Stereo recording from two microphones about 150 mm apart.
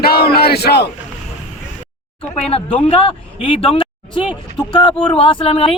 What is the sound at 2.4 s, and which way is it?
Speech, 40° left (ahead or behind).